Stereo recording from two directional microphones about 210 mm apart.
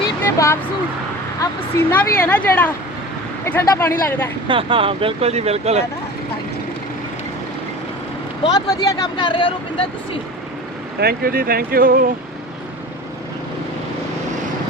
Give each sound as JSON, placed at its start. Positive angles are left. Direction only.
{"t": 0.3, "sound": "speech", "side_deg": 15}
{"t": 4.4, "sound": "speech", "side_deg": -25}
{"t": 8.4, "sound": "speech", "side_deg": 20}
{"t": 11.0, "sound": "speech", "side_deg": -45}